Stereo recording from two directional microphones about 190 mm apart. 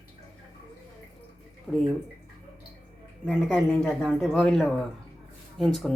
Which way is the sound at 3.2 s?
5° left (ahead or behind).